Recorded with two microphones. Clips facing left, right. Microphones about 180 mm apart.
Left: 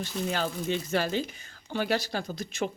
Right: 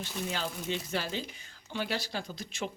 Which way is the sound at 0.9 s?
50° left (ahead or behind).